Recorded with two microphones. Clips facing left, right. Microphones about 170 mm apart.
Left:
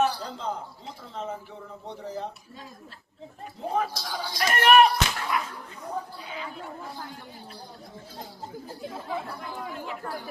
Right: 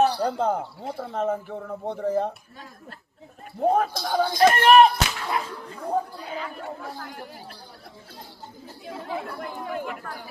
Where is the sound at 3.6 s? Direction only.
55° right (ahead or behind).